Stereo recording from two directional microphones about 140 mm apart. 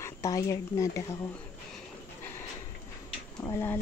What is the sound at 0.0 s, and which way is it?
Speech, 25° left (ahead or behind).